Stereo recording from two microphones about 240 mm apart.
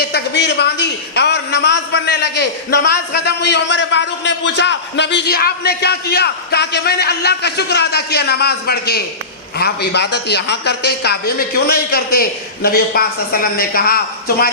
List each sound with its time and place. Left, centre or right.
0.1 s a man's voice: left